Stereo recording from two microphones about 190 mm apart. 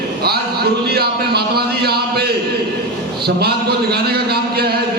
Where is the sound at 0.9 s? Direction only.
55° right (ahead or behind).